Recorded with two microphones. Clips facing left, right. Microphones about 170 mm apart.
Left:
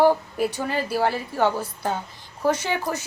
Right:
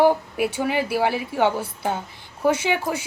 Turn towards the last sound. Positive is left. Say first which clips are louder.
# right 3 dB
turn(degrees=-10)  # may be behind; listen again after turning